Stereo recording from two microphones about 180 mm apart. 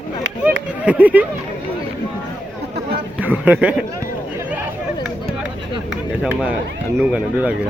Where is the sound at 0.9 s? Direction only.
10° right (ahead or behind).